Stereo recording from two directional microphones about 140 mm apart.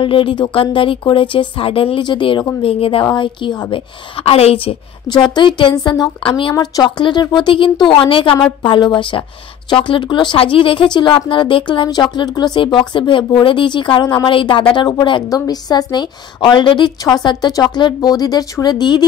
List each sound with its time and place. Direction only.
0.0 s speech: 40° left (ahead or behind)
4.2 s a woman's voice: 45° left (ahead or behind)
5.0 s speech: 30° left (ahead or behind)